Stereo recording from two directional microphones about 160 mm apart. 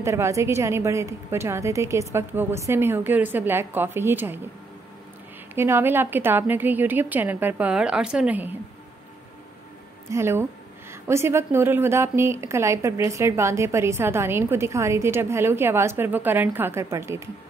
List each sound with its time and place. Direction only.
0.0 s a woman's voice: 15° right (ahead or behind)
5.5 s a woman's voice: 15° right (ahead or behind)
10.0 s a woman's voice: 15° right (ahead or behind)